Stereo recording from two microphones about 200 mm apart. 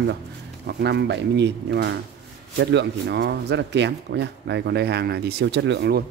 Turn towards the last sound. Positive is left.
turn(degrees=-60)  # may be behind; listen again after turning